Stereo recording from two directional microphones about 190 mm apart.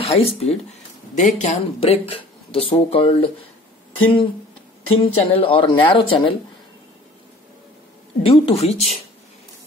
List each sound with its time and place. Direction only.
0.0 s speech: 30° left (ahead or behind)
5.0 s a woman's voice: 30° left (ahead or behind)
8.2 s speech: 30° left (ahead or behind)